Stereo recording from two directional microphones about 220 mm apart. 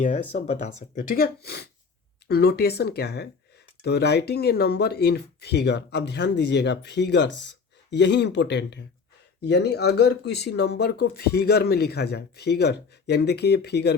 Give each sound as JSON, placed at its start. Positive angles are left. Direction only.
{"t": 0.0, "sound": "speech", "side_deg": 30}